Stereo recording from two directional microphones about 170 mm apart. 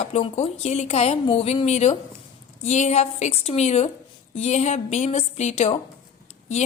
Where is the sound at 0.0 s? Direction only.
40° left (ahead or behind).